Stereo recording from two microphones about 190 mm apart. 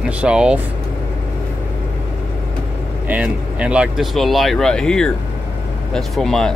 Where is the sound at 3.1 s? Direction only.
5° right (ahead or behind).